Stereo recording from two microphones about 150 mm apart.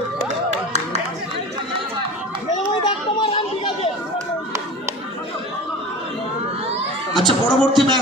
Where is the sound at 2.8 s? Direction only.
30° left (ahead or behind).